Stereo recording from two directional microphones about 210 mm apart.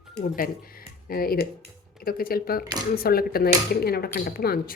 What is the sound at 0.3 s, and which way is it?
Speech, 45° left (ahead or behind).